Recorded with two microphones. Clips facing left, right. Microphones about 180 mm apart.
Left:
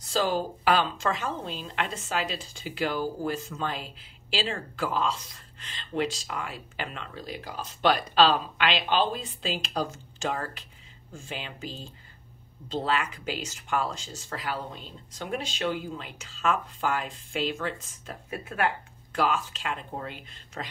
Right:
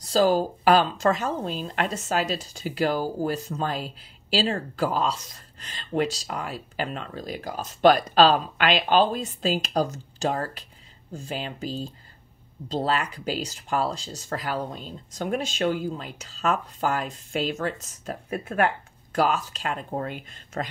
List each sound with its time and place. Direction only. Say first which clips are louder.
0.0 s a woman's voice: right 6 dB; 40° right (ahead or behind)